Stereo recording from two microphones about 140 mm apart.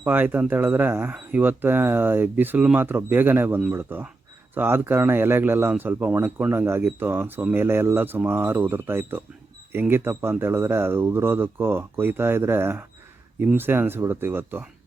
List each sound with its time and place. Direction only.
0.0 s speech: 15° right (ahead or behind)